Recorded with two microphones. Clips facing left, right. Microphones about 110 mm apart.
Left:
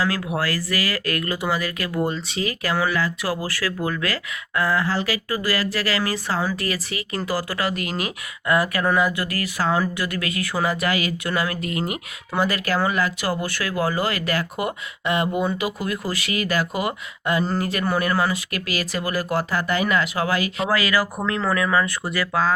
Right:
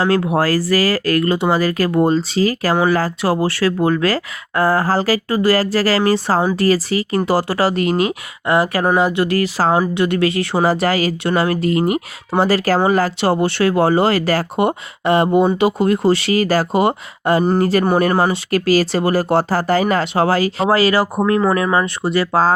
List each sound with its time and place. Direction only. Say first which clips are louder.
0.2 s speech: right 9 dB; 35° right (ahead or behind)